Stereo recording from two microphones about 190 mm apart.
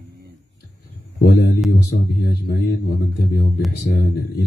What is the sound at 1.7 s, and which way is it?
Speech, 55° left (ahead or behind).